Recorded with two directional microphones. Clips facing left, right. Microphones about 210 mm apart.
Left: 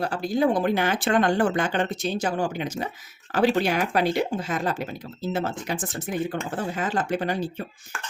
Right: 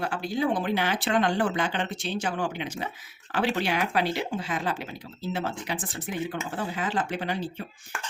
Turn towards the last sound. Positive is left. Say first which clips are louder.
# left 5 dB
turn(degrees=45)  # may be behind; listen again after turning